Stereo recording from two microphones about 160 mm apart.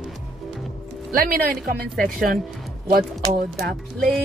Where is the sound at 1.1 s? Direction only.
60° right (ahead or behind).